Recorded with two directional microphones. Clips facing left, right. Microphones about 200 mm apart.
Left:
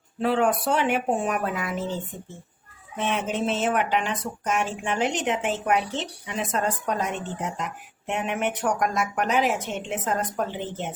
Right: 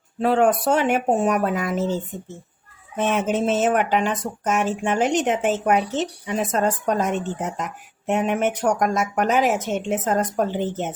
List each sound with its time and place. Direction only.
0.2 s speech: 45° right (ahead or behind)
3.0 s speech: 45° right (ahead or behind)